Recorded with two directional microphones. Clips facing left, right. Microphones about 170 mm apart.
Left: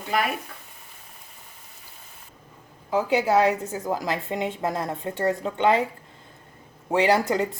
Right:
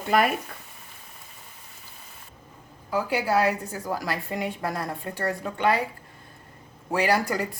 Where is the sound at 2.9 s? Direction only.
20° left (ahead or behind).